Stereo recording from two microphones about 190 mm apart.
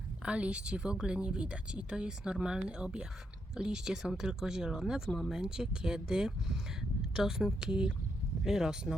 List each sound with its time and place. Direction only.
0.3 s speech: 5° right (ahead or behind)